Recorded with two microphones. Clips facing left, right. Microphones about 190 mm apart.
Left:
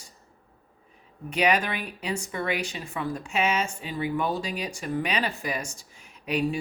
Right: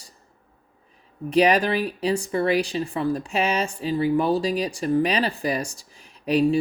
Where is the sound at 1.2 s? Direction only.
35° right (ahead or behind).